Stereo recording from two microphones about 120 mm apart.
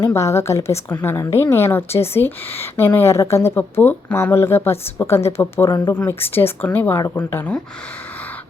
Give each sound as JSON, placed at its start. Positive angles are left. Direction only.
{"t": 0.1, "sound": "a woman's voice", "side_deg": 25}
{"t": 5.6, "sound": "speech", "side_deg": 35}
{"t": 5.9, "sound": "speech", "side_deg": 15}